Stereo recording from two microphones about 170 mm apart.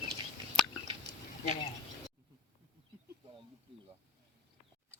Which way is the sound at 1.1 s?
75° right (ahead or behind).